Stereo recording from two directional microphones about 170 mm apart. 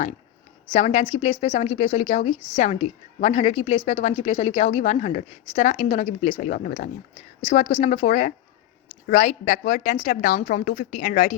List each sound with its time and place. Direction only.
0.7 s a woman's voice: 40° left (ahead or behind)